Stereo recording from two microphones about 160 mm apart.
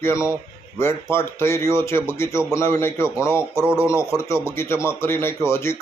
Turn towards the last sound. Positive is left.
turn(degrees=15)  # may be behind; listen again after turning